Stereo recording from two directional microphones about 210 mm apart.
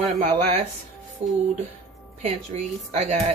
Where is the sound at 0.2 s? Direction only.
30° right (ahead or behind).